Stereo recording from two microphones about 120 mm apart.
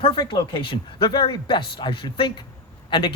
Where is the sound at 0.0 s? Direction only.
45° left (ahead or behind).